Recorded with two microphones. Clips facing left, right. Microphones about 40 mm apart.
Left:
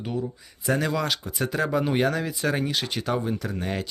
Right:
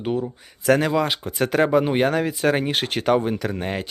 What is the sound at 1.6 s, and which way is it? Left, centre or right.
Speech, right.